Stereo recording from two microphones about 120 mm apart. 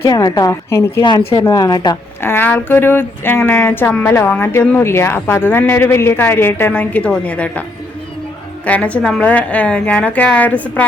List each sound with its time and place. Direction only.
0.0 s a woman's voice: 30° left (ahead or behind)
1.0 s a woman's voice: 40° left (ahead or behind)
1.4 s a woman's voice: 30° left (ahead or behind)
2.2 s speech: 15° left (ahead or behind)
8.6 s speech: 10° left (ahead or behind)